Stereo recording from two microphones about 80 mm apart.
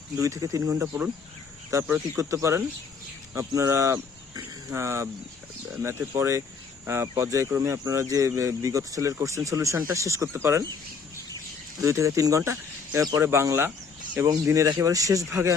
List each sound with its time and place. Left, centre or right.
0.2 s speech: right
11.8 s speech: right
13.7 s a sound: right
14.4 s speech: right